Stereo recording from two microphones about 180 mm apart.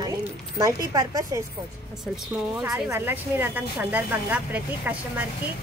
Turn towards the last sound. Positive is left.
turn(degrees=-10)  # may be behind; listen again after turning